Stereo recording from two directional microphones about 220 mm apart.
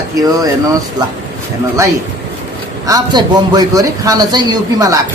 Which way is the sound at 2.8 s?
15° right (ahead or behind).